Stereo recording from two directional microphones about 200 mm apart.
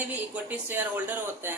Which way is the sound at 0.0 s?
10° right (ahead or behind).